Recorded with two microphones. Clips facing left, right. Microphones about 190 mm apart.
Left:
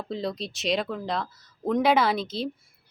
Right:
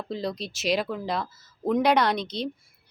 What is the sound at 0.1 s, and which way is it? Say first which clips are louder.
Speech: left 1 dB; centre (ahead or behind).